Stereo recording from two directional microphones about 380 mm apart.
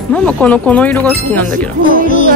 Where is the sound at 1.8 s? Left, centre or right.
Centre.